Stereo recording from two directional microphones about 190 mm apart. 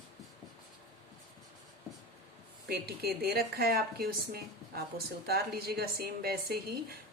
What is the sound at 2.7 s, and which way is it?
A woman's voice, 55° right (ahead or behind).